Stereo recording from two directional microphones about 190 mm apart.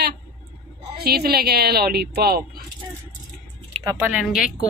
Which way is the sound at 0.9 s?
55° right (ahead or behind).